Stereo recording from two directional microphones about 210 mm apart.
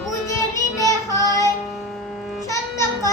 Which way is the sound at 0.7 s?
15° left (ahead or behind).